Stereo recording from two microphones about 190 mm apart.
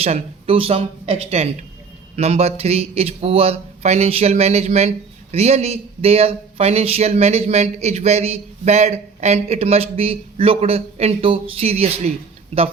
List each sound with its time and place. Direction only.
0.0 s speech: 30° right (ahead or behind)